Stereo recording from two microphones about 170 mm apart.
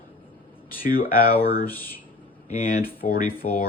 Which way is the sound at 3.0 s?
45° left (ahead or behind).